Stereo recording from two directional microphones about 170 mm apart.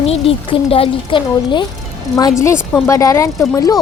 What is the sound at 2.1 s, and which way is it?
Speech, 20° left (ahead or behind).